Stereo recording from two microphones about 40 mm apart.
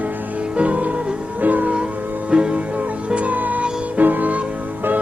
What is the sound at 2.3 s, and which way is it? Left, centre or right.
Music, right.